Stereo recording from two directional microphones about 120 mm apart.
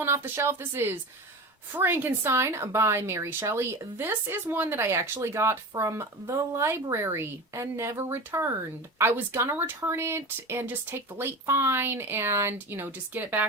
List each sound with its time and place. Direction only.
0.0 s a woman's voice: 20° right (ahead or behind)